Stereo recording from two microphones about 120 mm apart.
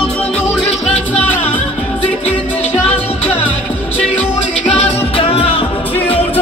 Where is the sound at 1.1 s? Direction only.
15° left (ahead or behind).